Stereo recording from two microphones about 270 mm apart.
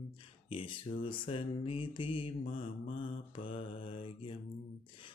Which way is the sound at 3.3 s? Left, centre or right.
Centre.